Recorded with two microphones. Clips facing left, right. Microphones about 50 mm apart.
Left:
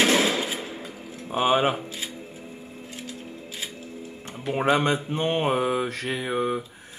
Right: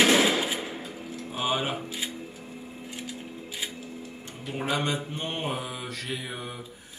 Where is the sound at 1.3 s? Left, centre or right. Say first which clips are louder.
Left 8 dB; left.